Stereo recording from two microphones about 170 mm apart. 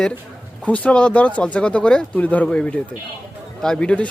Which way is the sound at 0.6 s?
10° left (ahead or behind).